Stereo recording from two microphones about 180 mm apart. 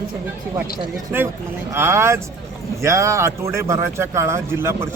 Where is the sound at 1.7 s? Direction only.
15° right (ahead or behind).